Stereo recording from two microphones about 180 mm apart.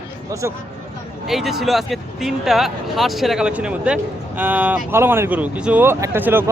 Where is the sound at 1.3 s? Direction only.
Centre (ahead or behind).